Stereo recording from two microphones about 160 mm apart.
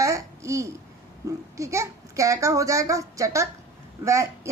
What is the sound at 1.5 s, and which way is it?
A woman's voice, 20° right (ahead or behind).